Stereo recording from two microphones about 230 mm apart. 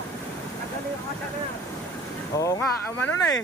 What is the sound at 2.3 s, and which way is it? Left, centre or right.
Speech, centre.